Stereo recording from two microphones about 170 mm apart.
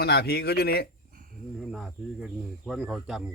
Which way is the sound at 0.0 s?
70° left (ahead or behind).